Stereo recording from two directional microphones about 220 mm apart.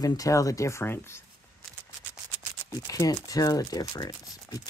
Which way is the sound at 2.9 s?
15° left (ahead or behind).